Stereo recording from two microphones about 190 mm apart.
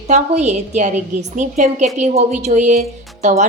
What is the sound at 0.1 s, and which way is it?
A woman's voice, 35° right (ahead or behind).